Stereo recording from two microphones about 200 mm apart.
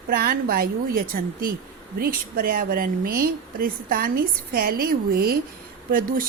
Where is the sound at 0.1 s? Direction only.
50° right (ahead or behind).